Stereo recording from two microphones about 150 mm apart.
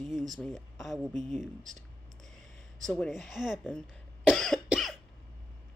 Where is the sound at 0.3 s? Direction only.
Centre (ahead or behind).